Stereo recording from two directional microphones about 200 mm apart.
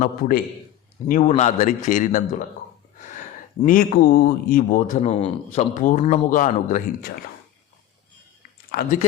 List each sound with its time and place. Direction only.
0.0 s a man's voice: 45° left (ahead or behind)
3.7 s speech: 45° left (ahead or behind)